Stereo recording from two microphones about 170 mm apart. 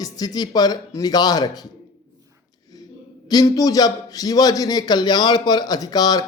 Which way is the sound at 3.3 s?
20° left (ahead or behind).